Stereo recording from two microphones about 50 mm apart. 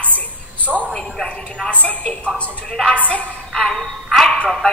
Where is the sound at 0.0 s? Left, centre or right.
Left.